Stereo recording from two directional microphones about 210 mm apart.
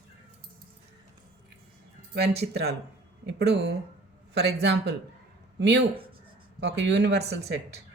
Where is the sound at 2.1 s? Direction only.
50° right (ahead or behind).